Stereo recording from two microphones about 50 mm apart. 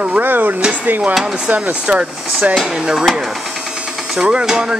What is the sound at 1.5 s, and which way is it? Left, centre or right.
Speech, right.